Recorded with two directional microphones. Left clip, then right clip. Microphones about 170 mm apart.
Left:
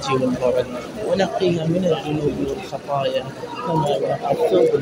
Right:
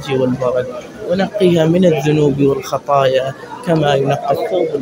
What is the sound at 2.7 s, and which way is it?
Speech, 75° right (ahead or behind).